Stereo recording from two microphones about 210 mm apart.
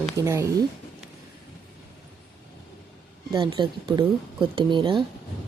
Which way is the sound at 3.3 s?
20° right (ahead or behind).